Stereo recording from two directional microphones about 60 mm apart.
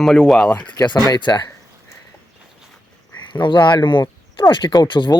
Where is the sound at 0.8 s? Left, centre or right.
Left.